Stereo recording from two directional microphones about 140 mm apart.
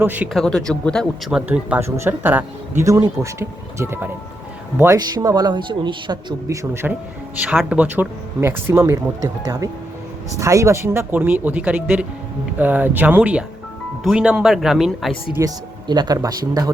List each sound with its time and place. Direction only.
0.0 s speech: 10° right (ahead or behind)
0.3 s speech: 5° left (ahead or behind)
1.3 s speech: 5° right (ahead or behind)
4.9 s speech: 30° right (ahead or behind)
7.7 s speech: 10° right (ahead or behind)
15.4 s speech: 30° right (ahead or behind)